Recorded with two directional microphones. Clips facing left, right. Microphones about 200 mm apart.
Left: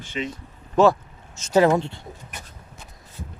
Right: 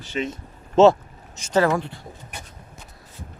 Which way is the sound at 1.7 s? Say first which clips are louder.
Left 3 dB; 25° left (ahead or behind).